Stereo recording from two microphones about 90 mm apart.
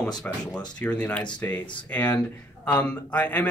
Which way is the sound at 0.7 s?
15° left (ahead or behind).